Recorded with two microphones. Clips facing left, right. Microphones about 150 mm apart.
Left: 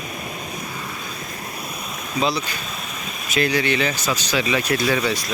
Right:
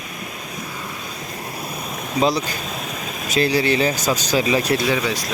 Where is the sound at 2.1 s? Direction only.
40° right (ahead or behind).